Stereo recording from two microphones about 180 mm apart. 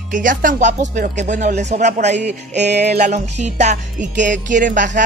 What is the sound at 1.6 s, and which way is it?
Speech, 40° right (ahead or behind).